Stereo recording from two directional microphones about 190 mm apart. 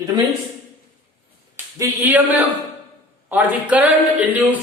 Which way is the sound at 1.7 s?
15° right (ahead or behind).